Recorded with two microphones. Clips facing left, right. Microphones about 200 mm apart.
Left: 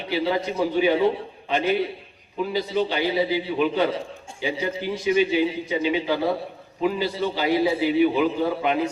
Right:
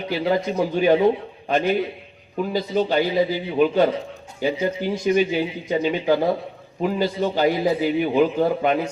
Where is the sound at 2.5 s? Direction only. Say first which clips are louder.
Right 4 dB; 45° right (ahead or behind).